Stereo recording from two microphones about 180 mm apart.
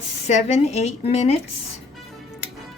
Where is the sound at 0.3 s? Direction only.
40° left (ahead or behind).